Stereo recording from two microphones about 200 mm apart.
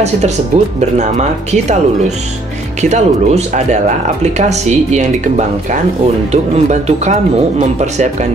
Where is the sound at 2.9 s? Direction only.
35° right (ahead or behind).